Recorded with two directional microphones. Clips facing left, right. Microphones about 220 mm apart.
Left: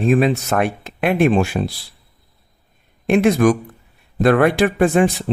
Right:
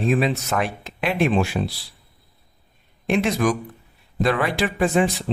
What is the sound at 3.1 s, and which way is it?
Speech, 50° left (ahead or behind).